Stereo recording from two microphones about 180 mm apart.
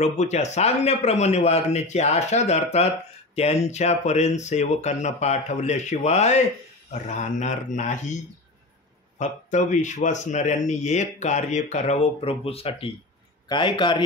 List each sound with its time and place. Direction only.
0.0 s speech: 40° left (ahead or behind)
9.2 s a man's voice: 40° left (ahead or behind); by 14.0 s 25° left (ahead or behind)